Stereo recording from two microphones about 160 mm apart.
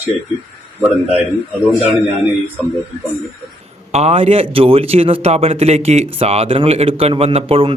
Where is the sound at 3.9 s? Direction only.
40° right (ahead or behind).